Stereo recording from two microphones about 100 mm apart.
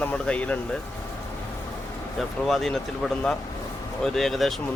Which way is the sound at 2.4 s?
5° left (ahead or behind).